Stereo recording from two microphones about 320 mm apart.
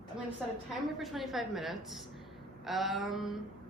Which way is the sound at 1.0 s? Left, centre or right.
Centre.